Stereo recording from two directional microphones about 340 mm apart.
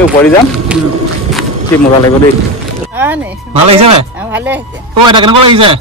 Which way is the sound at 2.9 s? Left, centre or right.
Centre.